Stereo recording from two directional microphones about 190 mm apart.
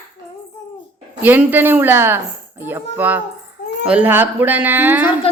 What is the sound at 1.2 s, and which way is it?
A woman's voice, 10° right (ahead or behind).